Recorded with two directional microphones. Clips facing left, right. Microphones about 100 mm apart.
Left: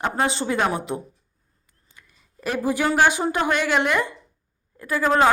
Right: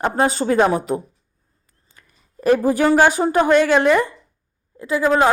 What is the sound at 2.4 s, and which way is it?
A woman's voice, 40° right (ahead or behind).